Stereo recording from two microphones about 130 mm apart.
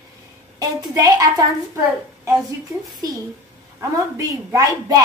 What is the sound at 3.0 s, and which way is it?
A woman's voice, 30° right (ahead or behind).